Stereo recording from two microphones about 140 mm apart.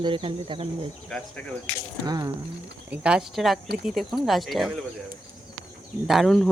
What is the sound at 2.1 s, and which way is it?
Speech, 25° right (ahead or behind).